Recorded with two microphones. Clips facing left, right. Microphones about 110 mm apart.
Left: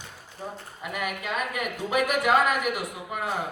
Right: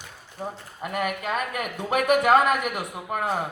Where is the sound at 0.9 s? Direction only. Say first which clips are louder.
Right 4 dB; 45° right (ahead or behind).